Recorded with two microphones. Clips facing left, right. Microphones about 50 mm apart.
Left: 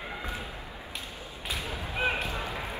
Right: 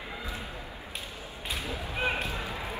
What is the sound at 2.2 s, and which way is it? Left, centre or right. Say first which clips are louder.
Basketball bounce: left 1 dB; left.